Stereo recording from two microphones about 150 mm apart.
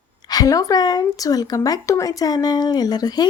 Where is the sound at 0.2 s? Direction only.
25° left (ahead or behind).